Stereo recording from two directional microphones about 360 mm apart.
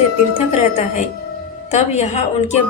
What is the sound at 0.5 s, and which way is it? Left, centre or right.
Speech, centre.